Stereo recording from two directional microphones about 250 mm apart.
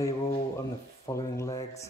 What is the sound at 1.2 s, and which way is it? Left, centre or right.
Speech, centre.